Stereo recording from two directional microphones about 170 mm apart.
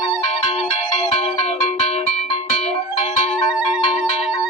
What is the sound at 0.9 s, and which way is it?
Music, 40° left (ahead or behind).